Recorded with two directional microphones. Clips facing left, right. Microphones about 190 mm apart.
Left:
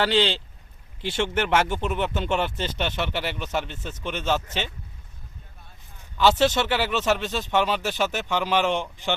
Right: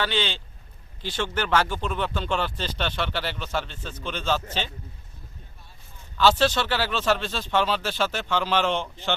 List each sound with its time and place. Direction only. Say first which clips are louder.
0.0 s speech: left 5 dB; 35° left (ahead or behind)
6.1 s speech: left 1 dB; 20° left (ahead or behind)